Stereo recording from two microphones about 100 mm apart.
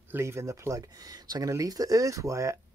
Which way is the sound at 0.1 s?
25° right (ahead or behind).